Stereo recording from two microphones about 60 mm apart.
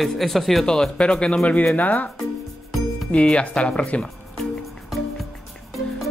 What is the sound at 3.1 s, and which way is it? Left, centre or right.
Speech, centre.